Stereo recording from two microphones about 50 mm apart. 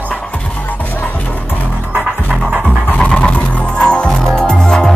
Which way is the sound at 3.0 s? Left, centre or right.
Left.